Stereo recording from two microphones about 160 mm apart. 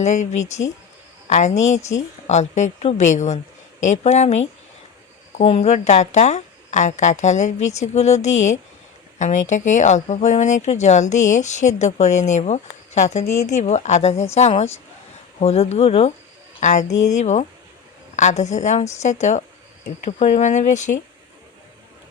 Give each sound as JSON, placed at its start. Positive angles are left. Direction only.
{"t": 0.0, "sound": "a woman's voice", "side_deg": 45}